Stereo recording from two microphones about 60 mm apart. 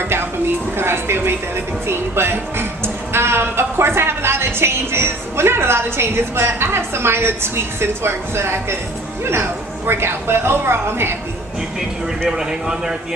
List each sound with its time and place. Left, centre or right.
0.0 s a sound: right
0.8 s a woman's voice: right
12.3 s speech: centre